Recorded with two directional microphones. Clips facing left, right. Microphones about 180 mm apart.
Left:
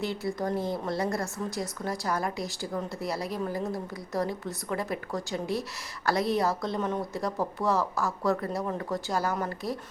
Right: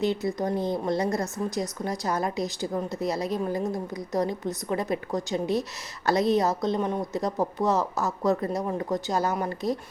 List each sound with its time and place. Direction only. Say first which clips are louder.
0.0 s a woman's voice: right 4 dB; 20° right (ahead or behind)